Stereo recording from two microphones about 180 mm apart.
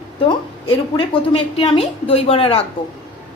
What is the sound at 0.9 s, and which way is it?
A woman's voice, 30° left (ahead or behind).